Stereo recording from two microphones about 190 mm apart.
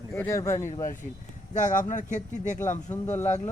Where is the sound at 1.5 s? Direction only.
40° left (ahead or behind).